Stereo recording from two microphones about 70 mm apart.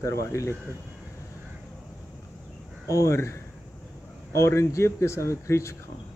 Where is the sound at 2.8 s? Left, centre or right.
Left.